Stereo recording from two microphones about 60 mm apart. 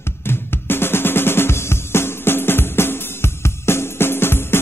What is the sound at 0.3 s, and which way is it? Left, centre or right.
Drum, left.